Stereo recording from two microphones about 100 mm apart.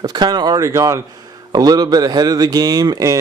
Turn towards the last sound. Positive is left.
turn(degrees=-40)  # may be behind; listen again after turning